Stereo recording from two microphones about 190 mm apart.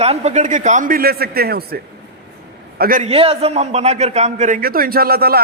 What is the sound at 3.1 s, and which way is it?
A man's voice, 30° right (ahead or behind).